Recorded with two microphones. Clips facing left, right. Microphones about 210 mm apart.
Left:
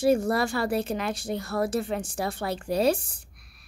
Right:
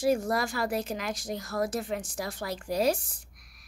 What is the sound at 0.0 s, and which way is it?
A woman's voice, 30° left (ahead or behind).